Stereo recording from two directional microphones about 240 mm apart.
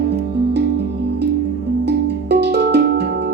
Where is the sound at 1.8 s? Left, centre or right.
Right.